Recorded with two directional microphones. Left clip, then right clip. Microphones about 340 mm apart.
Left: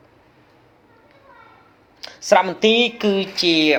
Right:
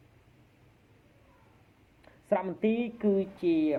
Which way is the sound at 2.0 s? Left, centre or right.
Left.